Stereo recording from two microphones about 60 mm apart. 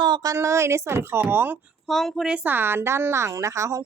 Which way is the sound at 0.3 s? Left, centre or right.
Right.